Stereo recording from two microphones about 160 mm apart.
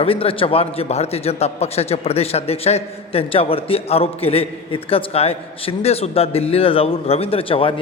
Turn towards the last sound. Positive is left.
turn(degrees=35)  # may be behind; listen again after turning